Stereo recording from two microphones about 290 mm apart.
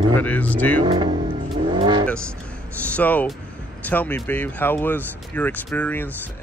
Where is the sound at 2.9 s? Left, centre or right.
Centre.